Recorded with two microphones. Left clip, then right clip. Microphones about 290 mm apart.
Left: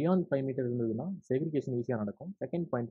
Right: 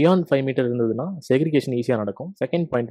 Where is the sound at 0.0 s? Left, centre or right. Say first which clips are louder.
Right 12 dB; right.